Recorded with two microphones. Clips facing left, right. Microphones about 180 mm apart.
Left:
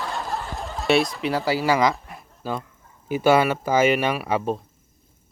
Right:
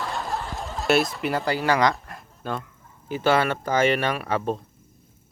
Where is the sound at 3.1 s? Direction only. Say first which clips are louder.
Left 3 dB; 10° left (ahead or behind).